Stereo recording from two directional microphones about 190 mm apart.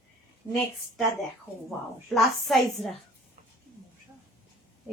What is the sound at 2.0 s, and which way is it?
Speech, centre (ahead or behind).